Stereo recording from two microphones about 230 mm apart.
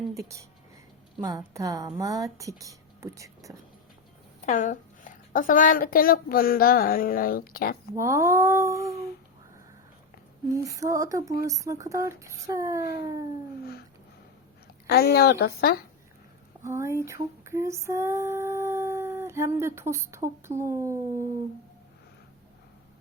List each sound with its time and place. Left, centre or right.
1.5 s speech: centre
4.4 s a woman's voice: left
7.9 s speech: centre
10.5 s speech: centre
14.8 s a woman's voice: left
16.6 s female singing: centre